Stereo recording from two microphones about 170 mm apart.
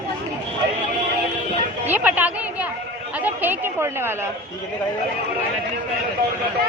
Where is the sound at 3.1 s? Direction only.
10° right (ahead or behind).